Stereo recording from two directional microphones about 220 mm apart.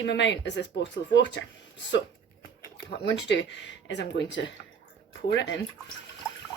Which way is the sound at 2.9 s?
50° left (ahead or behind).